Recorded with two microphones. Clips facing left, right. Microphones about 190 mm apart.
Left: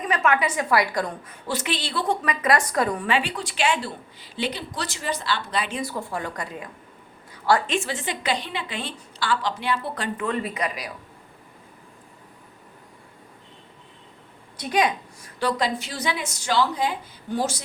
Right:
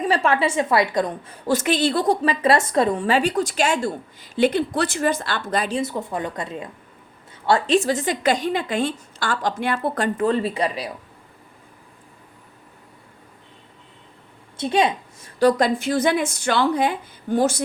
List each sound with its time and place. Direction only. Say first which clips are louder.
0.0 s a woman's voice: right 3 dB; 30° right (ahead or behind)
1.5 s a woman's voice: right 9 dB; 45° right (ahead or behind)
2.2 s a woman's voice: right 4 dB; 30° right (ahead or behind)
3.1 s a woman's voice: right 6 dB; 40° right (ahead or behind)
5.7 s a woman's voice: right 4 dB; 20° right (ahead or behind)
7.7 s a woman's voice: right 8 dB; 40° right (ahead or behind)
10.2 s speech: right 5 dB; 30° right (ahead or behind)
14.6 s a woman's voice: right 3 dB; 25° right (ahead or behind)
15.4 s a woman's voice: right 7 dB; 45° right (ahead or behind)